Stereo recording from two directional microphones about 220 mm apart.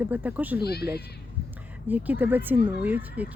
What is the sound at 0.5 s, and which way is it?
Speech, 45° left (ahead or behind).